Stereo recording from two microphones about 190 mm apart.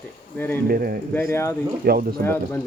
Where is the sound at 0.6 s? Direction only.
50° right (ahead or behind).